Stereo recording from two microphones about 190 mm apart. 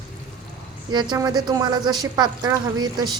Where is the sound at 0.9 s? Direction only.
20° right (ahead or behind).